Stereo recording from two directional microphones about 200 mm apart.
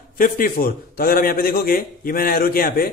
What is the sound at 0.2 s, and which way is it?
A man's voice, 45° left (ahead or behind).